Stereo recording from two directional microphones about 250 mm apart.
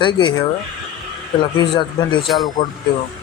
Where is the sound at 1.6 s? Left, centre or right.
Centre.